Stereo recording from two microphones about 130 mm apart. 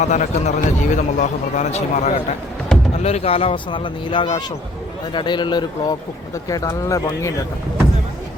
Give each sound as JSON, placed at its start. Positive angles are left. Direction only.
{"t": 0.0, "sound": "a man's voice", "side_deg": 65}